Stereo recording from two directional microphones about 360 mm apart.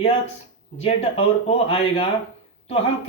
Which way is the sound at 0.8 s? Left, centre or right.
Centre.